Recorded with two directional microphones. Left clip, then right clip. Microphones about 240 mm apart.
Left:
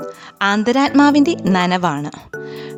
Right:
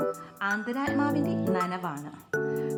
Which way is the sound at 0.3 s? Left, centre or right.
Left.